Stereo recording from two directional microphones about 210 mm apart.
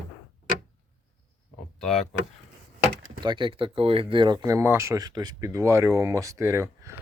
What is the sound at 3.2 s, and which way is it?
Speech, 20° right (ahead or behind).